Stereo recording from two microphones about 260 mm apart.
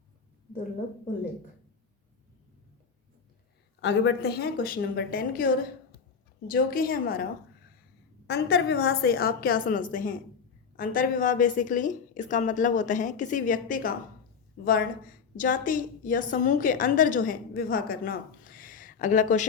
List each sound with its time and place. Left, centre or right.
3.8 s a woman's voice: left
6.5 s a woman's voice: left
8.3 s a woman's voice: left